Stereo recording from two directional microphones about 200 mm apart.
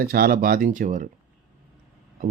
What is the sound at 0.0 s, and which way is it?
Speech, 50° right (ahead or behind).